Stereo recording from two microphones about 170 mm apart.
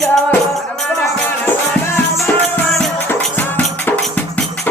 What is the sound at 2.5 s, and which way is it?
Music, 5° left (ahead or behind).